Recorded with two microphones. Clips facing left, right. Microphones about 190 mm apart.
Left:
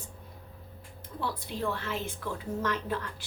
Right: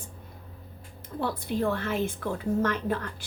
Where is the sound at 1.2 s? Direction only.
50° right (ahead or behind).